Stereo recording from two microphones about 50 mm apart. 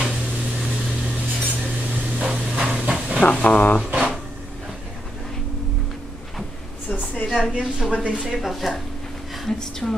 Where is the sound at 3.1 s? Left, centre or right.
Left.